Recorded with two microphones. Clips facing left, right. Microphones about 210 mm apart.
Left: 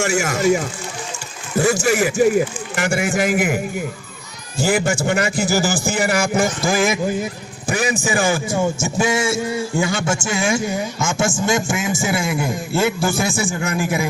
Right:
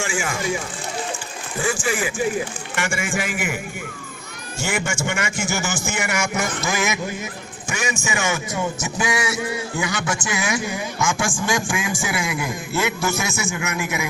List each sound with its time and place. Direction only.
0.0 s a man's voice: 40° left (ahead or behind)
4.6 s a man's voice: 35° left (ahead or behind)